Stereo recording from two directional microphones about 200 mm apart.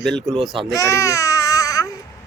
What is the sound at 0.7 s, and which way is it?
Baby cry, 15° left (ahead or behind).